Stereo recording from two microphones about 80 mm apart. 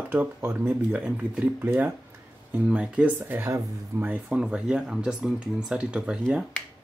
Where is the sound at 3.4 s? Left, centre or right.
Right.